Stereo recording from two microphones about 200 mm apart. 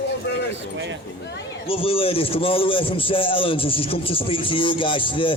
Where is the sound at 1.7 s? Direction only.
25° left (ahead or behind).